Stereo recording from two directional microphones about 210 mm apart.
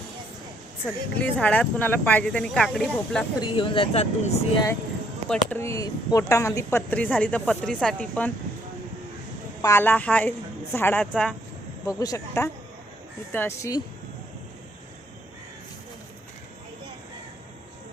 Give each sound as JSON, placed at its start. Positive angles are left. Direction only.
{"t": 1.2, "sound": "speech", "side_deg": 5}
{"t": 3.4, "sound": "speech", "side_deg": 25}
{"t": 5.3, "sound": "speech", "side_deg": 10}
{"t": 9.6, "sound": "speech", "side_deg": 15}
{"t": 11.9, "sound": "speech", "side_deg": 15}